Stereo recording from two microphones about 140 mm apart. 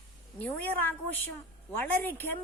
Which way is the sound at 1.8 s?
15° left (ahead or behind).